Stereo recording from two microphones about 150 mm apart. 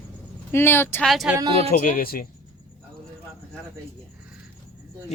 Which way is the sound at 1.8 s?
65° left (ahead or behind).